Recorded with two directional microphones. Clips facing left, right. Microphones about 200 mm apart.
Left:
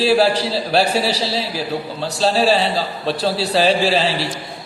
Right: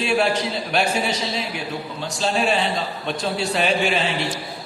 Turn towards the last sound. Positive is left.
turn(degrees=35)  # may be behind; listen again after turning